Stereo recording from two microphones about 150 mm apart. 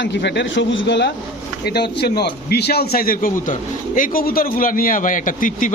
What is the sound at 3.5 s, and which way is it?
A man's voice, 60° left (ahead or behind).